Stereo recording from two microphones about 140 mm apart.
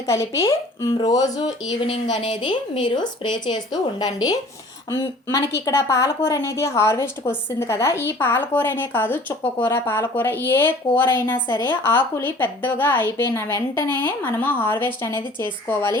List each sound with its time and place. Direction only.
0.1 s a woman's voice: 20° left (ahead or behind)
2.1 s a woman's voice: 40° left (ahead or behind); by 16.0 s 15° left (ahead or behind)